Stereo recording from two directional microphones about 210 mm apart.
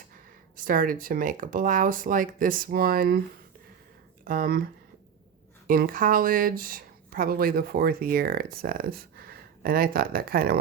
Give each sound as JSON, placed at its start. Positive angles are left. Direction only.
{"t": 0.5, "sound": "speech", "side_deg": -40}
{"t": 4.2, "sound": "speech", "side_deg": -40}